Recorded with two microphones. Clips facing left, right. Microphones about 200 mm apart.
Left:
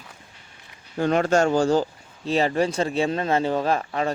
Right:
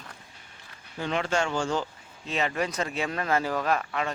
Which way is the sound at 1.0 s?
45° left (ahead or behind).